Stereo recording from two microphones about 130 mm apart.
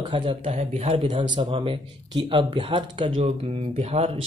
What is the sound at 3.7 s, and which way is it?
Speech, 50° right (ahead or behind).